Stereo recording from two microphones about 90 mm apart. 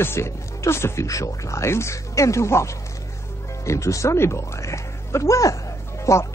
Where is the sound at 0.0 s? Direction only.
30° left (ahead or behind).